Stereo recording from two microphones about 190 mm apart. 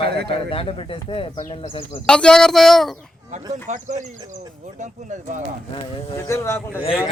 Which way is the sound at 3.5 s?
40° right (ahead or behind).